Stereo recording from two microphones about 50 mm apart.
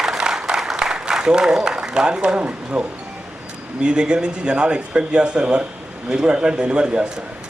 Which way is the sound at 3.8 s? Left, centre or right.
Centre.